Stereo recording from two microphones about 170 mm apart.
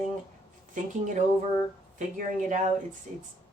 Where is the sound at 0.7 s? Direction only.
50° right (ahead or behind).